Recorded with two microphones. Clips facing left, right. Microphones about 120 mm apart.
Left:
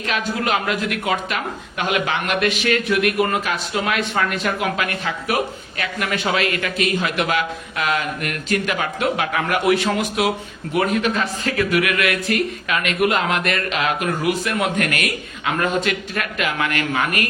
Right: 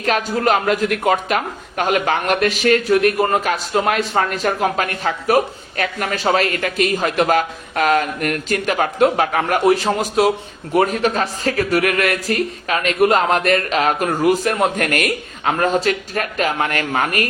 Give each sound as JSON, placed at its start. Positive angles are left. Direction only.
{"t": 0.0, "sound": "a man's voice", "side_deg": -40}